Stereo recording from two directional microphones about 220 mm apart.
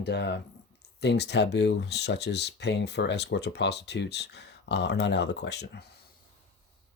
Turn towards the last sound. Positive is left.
turn(degrees=50)  # may be behind; listen again after turning